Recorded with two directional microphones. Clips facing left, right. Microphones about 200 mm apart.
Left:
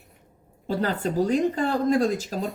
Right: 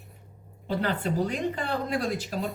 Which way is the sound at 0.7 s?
40° left (ahead or behind).